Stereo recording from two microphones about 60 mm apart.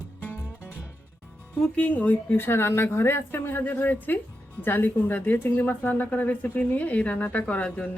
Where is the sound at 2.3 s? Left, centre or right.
Left.